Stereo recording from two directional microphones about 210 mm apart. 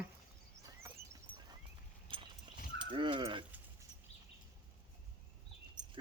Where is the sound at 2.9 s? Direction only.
25° right (ahead or behind).